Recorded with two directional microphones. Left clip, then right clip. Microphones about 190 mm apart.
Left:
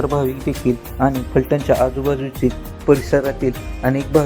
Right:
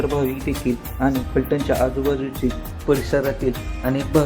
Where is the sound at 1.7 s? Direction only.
30° left (ahead or behind).